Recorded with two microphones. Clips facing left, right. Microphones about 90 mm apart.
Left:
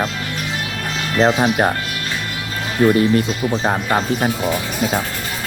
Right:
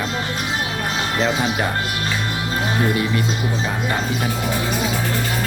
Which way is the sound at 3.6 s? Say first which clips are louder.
Left 6 dB; 45° left (ahead or behind).